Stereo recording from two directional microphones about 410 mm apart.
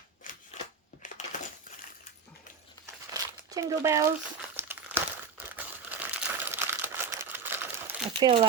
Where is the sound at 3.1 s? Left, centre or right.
Centre.